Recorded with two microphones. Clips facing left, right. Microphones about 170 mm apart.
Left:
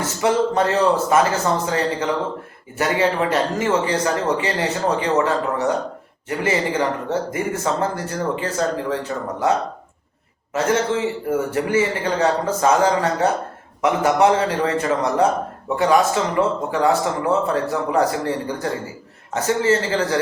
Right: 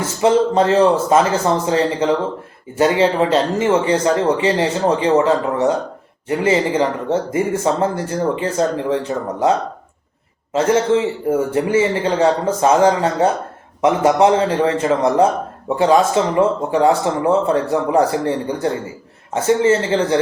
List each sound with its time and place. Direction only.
0.0 s speech: 25° right (ahead or behind)